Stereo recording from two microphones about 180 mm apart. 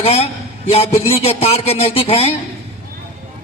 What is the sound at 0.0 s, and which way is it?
A man's voice, 35° left (ahead or behind).